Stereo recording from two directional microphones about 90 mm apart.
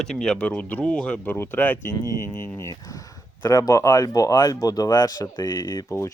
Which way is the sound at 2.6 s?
40° left (ahead or behind).